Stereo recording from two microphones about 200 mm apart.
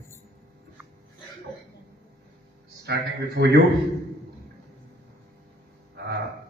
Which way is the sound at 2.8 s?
55° right (ahead or behind).